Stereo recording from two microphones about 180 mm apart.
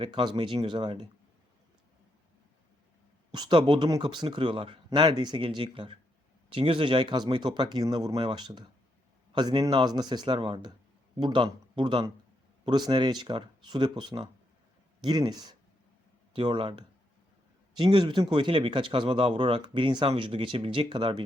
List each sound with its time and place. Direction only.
0.0 s speech: 25° right (ahead or behind)
3.3 s speech: 25° right (ahead or behind)